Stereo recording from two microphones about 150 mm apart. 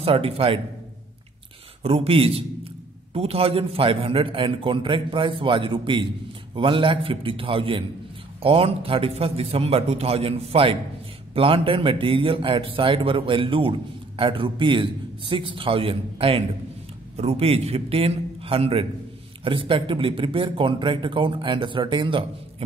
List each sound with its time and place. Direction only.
0.0 s a man's voice: 40° right (ahead or behind)
1.8 s a man's voice: 40° right (ahead or behind)